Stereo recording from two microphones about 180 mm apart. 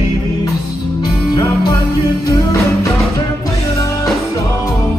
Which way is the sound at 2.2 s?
20° left (ahead or behind).